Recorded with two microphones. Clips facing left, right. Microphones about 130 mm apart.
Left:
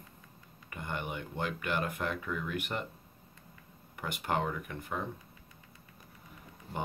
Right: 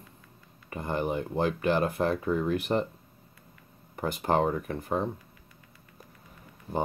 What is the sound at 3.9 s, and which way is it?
Speech, 35° right (ahead or behind).